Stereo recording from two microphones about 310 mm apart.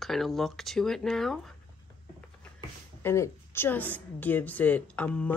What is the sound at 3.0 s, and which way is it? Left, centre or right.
A woman's voice, centre.